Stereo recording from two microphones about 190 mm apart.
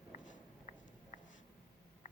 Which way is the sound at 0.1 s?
40° left (ahead or behind).